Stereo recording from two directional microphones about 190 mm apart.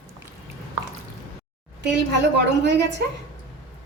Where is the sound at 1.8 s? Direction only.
65° right (ahead or behind).